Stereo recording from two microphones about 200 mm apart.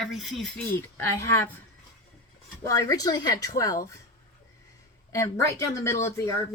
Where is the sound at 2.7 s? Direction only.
15° left (ahead or behind).